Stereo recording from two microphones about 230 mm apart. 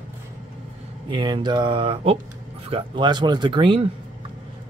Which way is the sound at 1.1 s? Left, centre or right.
Centre.